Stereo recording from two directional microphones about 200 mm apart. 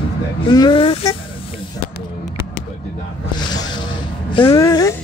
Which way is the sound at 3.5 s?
20° left (ahead or behind).